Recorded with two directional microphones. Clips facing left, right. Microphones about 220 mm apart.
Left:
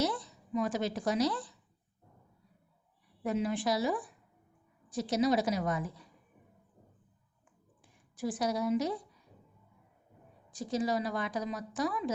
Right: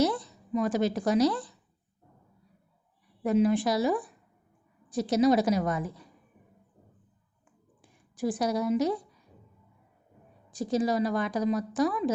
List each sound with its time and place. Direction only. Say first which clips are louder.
0.0 s a woman's voice: right 6 dB; 40° right (ahead or behind)
3.2 s a woman's voice: right 7 dB; 45° right (ahead or behind)
8.1 s a woman's voice: right 5 dB; 40° right (ahead or behind)
10.5 s a woman's voice: right 5 dB; 40° right (ahead or behind)